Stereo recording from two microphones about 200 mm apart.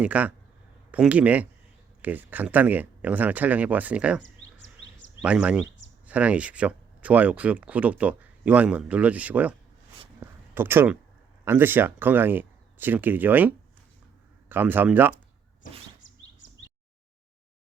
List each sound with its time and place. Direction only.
0.0 s speech: 5° right (ahead or behind)
4.2 s a sound: 65° left (ahead or behind)
5.2 s speech: 5° right (ahead or behind)
10.2 s a sound: 10° right (ahead or behind)
11.4 s speech: 10° right (ahead or behind)
14.5 s speech: 10° right (ahead or behind)